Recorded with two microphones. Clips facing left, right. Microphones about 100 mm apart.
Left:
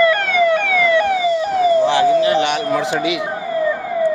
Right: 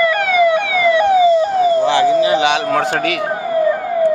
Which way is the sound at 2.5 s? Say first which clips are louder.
Right 2 dB; 85° right.